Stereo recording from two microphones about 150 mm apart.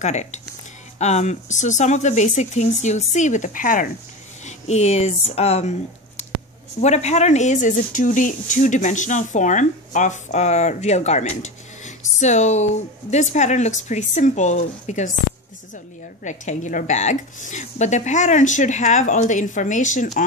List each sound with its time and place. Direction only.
0.0 s speech: 50° left (ahead or behind)
4.5 s speech: 45° left (ahead or behind)
16.3 s speech: 55° left (ahead or behind)